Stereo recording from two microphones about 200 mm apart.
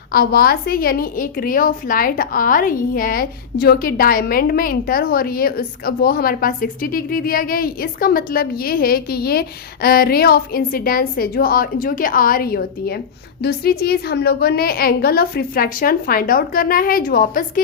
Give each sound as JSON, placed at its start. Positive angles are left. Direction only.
{"t": 0.1, "sound": "a woman's voice", "side_deg": 50}